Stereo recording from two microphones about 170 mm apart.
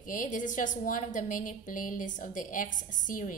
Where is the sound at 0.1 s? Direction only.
50° left (ahead or behind).